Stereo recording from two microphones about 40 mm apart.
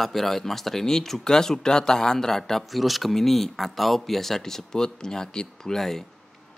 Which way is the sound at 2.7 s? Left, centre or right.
Centre.